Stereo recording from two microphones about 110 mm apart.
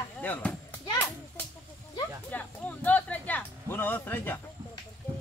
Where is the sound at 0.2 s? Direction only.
15° left (ahead or behind).